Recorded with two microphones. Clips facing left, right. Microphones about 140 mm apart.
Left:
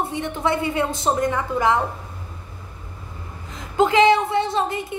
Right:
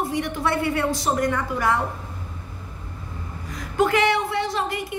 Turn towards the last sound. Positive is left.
turn(degrees=25)  # may be behind; listen again after turning